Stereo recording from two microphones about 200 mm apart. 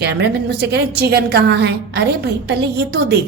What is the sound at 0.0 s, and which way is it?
A woman's voice, 55° right (ahead or behind).